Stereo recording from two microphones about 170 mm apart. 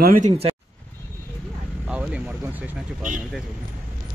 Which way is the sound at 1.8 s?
5° right (ahead or behind).